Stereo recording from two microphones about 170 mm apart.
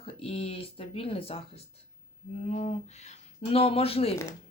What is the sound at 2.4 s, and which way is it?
Speech, 40° left (ahead or behind).